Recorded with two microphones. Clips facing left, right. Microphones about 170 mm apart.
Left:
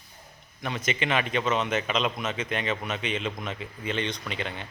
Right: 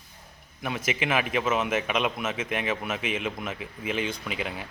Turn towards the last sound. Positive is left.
turn(degrees=-5)  # may be behind; listen again after turning